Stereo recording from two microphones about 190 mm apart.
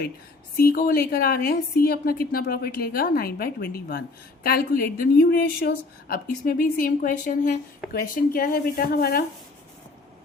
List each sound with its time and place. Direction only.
0.5 s a woman's voice: 50° left (ahead or behind)